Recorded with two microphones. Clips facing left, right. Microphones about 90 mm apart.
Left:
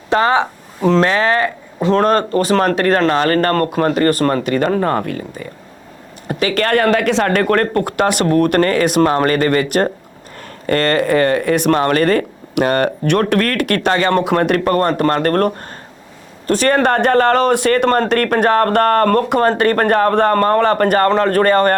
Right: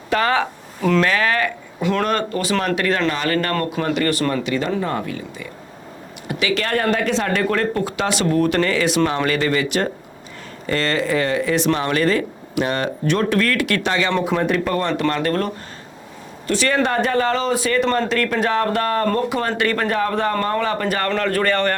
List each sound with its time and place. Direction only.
0.1 s speech: 25° left (ahead or behind); by 6.7 s 45° left (ahead or behind)
6.7 s speech: 70° left (ahead or behind)
19.5 s speech: 40° left (ahead or behind)
21.0 s speech: 35° left (ahead or behind)